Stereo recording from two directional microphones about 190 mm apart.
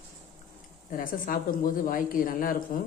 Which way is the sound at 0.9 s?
45° left (ahead or behind).